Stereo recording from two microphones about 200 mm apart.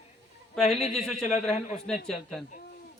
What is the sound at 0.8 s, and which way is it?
Speech, 35° left (ahead or behind).